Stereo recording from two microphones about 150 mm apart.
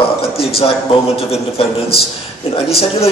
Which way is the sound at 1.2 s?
40° left (ahead or behind).